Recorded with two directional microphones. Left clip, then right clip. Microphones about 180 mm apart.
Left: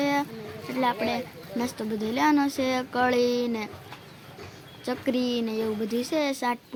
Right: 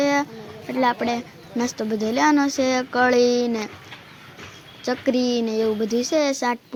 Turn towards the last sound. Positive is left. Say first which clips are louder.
# right 6 dB
turn(degrees=-25)  # may be behind; listen again after turning